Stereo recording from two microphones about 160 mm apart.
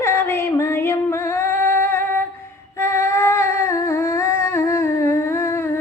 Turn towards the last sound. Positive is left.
turn(degrees=15)  # may be behind; listen again after turning